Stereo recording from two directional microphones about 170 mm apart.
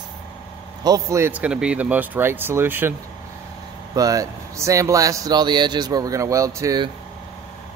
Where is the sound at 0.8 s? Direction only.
20° right (ahead or behind).